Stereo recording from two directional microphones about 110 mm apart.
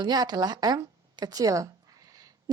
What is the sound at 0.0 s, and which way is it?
Speech, 40° right (ahead or behind).